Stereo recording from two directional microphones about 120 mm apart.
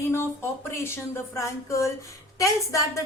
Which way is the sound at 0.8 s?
25° left (ahead or behind).